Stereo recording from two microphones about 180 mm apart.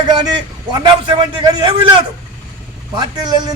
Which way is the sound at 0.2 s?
25° right (ahead or behind).